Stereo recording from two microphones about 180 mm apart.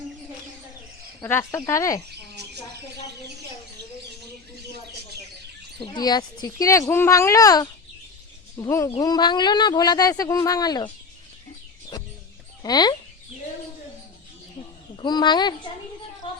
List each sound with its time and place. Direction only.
1.2 s speech: 15° left (ahead or behind)
2.0 s cricket: 70° right (ahead or behind)
5.8 s speech: 25° left (ahead or behind)
12.6 s speech: 25° left (ahead or behind)
14.9 s a woman's voice: 25° left (ahead or behind)
16.2 s a sound: 25° left (ahead or behind)